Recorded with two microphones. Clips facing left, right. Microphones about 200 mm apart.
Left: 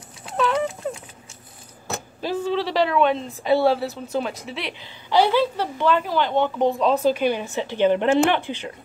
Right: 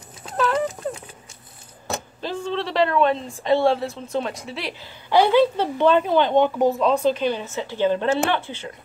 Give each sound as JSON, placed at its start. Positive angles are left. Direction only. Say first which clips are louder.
{"t": 0.4, "sound": "a sound", "louder": "even", "side_deg": 0}
{"t": 2.2, "sound": "a woman's voice", "louder": "left 3 dB", "side_deg": 5}
{"t": 5.1, "sound": "speech", "louder": "right 2 dB", "side_deg": -15}
{"t": 6.7, "sound": "speech", "louder": "even", "side_deg": 0}